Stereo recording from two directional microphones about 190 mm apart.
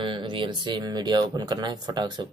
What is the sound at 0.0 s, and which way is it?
Speech, 25° right (ahead or behind).